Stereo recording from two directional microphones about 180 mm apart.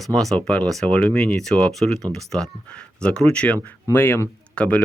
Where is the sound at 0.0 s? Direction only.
Centre (ahead or behind).